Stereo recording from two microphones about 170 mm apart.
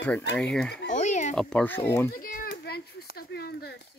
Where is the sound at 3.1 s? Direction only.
65° left (ahead or behind).